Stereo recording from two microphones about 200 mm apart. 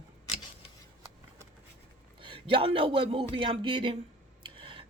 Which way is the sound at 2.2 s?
25° right (ahead or behind).